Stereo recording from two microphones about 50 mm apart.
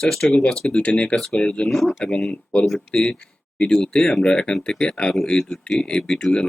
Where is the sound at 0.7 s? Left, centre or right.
Left.